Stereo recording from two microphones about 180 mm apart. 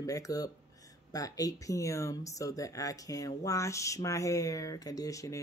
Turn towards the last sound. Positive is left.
turn(degrees=20)  # may be behind; listen again after turning